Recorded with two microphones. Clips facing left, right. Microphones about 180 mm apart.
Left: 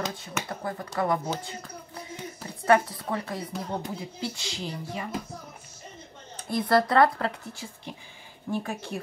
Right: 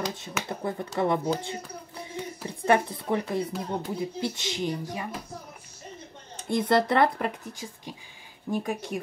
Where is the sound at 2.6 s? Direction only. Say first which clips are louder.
Left 1 dB; 25° right (ahead or behind).